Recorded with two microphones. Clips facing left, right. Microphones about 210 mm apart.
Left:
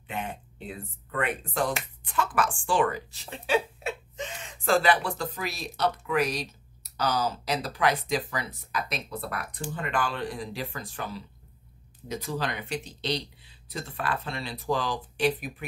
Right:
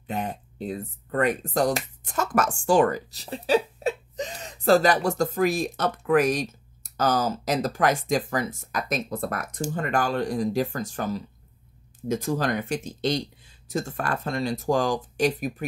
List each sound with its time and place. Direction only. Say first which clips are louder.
0.0 s speech: right 5 dB; 40° right (ahead or behind)